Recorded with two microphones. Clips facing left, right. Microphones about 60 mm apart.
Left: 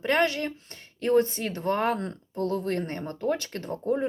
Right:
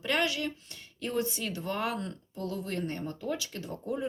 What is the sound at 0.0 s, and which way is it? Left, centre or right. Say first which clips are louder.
Speech: left 5 dB; left.